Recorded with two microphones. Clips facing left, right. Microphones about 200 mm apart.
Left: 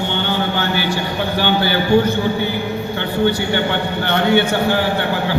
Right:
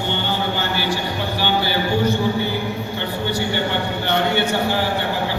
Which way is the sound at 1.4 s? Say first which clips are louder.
Left 2 dB; 55° left (ahead or behind).